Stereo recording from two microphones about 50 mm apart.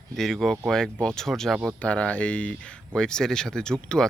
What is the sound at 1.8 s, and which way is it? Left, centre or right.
Speech, left.